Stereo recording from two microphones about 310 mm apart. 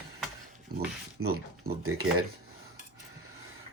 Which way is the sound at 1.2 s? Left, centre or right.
Right.